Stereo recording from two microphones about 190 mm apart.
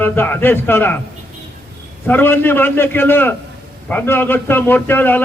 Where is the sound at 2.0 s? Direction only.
10° left (ahead or behind).